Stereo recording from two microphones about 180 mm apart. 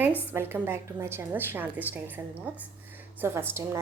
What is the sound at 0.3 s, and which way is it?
A woman's voice, 15° right (ahead or behind).